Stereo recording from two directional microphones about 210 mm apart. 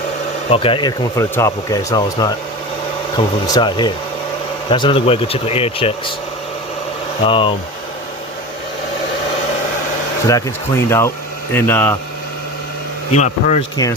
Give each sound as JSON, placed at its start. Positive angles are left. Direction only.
{"t": 0.5, "sound": "speech", "side_deg": 25}
{"t": 3.4, "sound": "speech", "side_deg": 20}
{"t": 7.3, "sound": "speech", "side_deg": 25}
{"t": 10.2, "sound": "speech", "side_deg": 15}
{"t": 13.1, "sound": "speech", "side_deg": 35}